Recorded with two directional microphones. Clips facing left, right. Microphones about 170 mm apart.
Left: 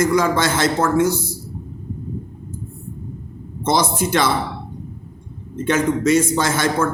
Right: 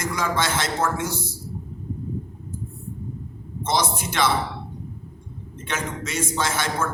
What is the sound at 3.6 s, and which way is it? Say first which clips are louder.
Speech: left 6 dB; 40° left (ahead or behind).